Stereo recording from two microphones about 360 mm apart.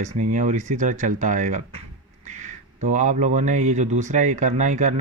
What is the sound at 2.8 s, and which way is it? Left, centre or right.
Speech, centre.